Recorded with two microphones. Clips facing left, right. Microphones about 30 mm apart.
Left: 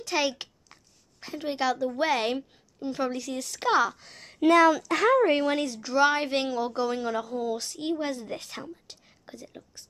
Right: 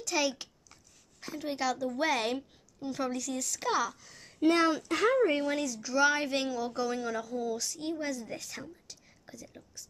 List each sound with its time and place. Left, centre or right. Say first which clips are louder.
0.0 s a sound: left 3 dB; left
1.2 s speech: left 4 dB; left
4.0 s speech: left 3 dB; left
5.6 s a woman's voice: left 4 dB; left
8.8 s whispering: left 3 dB; left